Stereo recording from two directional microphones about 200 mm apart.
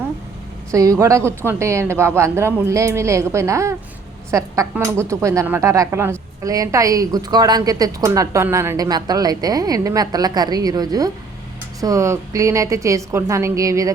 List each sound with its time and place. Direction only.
0.7 s speech: 15° right (ahead or behind)